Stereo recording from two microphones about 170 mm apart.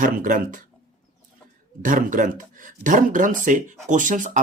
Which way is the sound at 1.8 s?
50° right (ahead or behind).